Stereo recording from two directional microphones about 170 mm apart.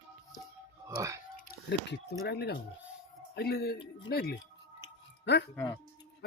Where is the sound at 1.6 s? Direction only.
85° left.